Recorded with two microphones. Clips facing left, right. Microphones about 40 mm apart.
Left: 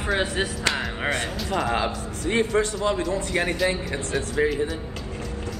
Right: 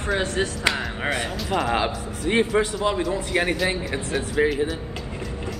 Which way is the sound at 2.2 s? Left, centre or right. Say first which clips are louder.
Right 2 dB; right.